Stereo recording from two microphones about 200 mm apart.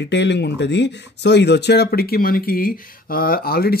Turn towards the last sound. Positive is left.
turn(degrees=50)  # may be behind; listen again after turning